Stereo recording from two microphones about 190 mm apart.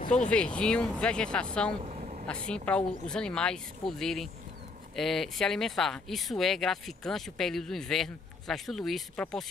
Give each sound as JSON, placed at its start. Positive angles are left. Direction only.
{"t": 0.0, "sound": "speech", "side_deg": 40}
{"t": 0.3, "sound": "speech", "side_deg": 5}
{"t": 1.8, "sound": "vehicle", "side_deg": -35}
{"t": 2.4, "sound": "speech", "side_deg": 5}